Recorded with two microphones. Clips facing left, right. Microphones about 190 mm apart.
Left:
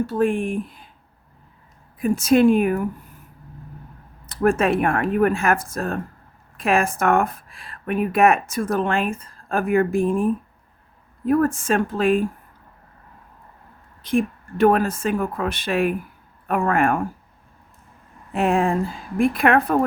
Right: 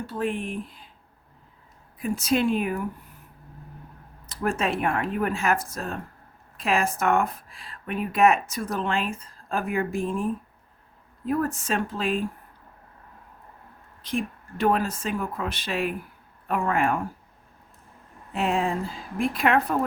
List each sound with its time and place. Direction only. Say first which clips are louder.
0.1 s speech: left 8 dB; 50° left (ahead or behind)
2.0 s speech: left 8 dB; 50° left (ahead or behind)
4.3 s speech: left 8 dB; 55° left (ahead or behind)
11.3 s speech: left 7 dB; 50° left (ahead or behind)
14.0 s speech: left 8 dB; 55° left (ahead or behind)
18.3 s a woman's voice: left 6 dB; 55° left (ahead or behind)